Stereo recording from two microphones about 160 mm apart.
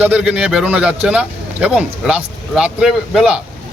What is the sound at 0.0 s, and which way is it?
A man's voice, 10° right (ahead or behind).